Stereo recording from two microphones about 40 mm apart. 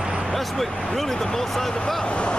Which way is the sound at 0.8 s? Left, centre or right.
Centre.